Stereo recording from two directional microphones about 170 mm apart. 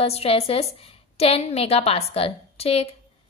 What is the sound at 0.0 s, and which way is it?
A woman's voice, 35° left (ahead or behind).